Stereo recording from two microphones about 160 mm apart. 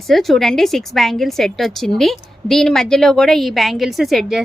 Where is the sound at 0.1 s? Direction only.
Centre (ahead or behind).